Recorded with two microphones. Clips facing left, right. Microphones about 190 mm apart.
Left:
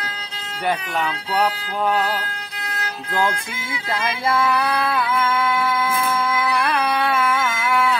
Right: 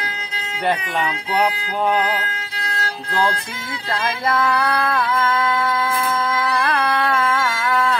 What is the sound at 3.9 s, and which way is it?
Music, 10° left (ahead or behind).